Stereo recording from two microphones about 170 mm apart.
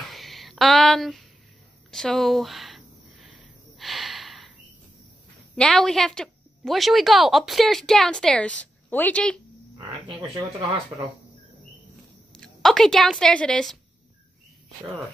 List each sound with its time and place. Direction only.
0.0 s a sound: centre (ahead or behind)
5.6 s a woman's voice: 5° left (ahead or behind)
12.3 s a woman's voice: 5° left (ahead or behind)